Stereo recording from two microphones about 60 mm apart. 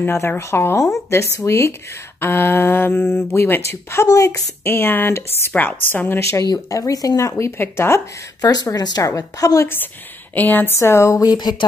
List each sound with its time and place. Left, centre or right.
0.0 s speech: left
2.1 s mantra: left
4.0 s a woman's voice: left
4.6 s mantra: left
5.5 s a woman's voice: left
6.1 s speech: left
7.2 s speech: left
7.6 s speech: left
8.7 s a woman's voice: left
10.3 s mantra: left
10.8 s speech: left